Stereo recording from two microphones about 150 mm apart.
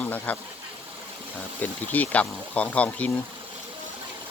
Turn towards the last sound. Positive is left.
turn(degrees=10)  # may be behind; listen again after turning